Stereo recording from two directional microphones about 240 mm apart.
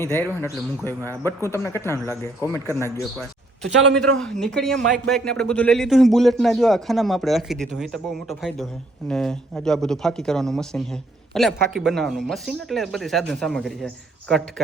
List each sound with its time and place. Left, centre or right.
0.0 s a man's voice: centre